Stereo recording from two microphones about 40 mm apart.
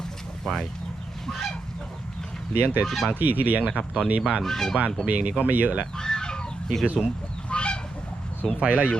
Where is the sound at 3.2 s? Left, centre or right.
Right.